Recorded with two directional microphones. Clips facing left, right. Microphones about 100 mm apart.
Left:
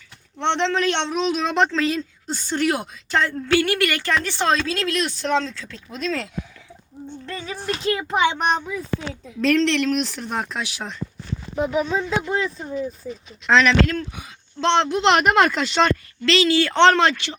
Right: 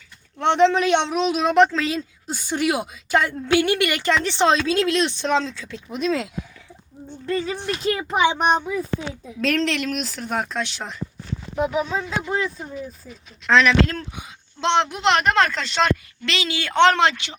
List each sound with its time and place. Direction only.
0.3 s a man's voice: 5° right (ahead or behind)
7.3 s speech: 5° right (ahead or behind)
9.6 s speech: 5° right (ahead or behind)
10.6 s speech: 10° left (ahead or behind)
11.5 s a man's voice: 5° right (ahead or behind)
14.2 s speech: 15° right (ahead or behind)
15.0 s speech: 10° left (ahead or behind)
16.2 s a man's voice: 15° right (ahead or behind)